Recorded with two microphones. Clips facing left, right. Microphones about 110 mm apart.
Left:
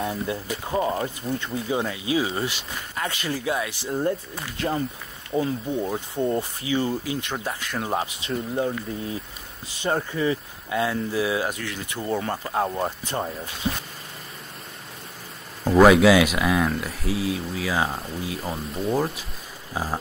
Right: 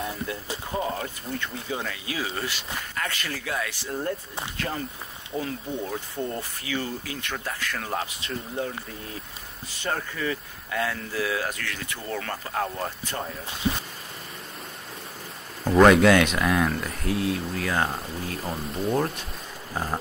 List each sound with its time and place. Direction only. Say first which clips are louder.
0.3 s speech: left 4 dB; 25° left (ahead or behind)
9.8 s speech: left 5 dB; 25° left (ahead or behind)
15.6 s speech: left 1 dB; 5° left (ahead or behind)